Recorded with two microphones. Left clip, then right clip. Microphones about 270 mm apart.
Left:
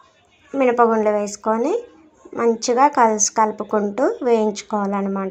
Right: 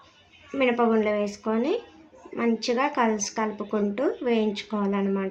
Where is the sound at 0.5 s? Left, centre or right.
Centre.